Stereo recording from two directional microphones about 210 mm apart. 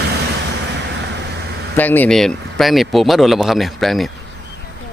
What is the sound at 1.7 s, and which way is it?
Speech, 10° left (ahead or behind).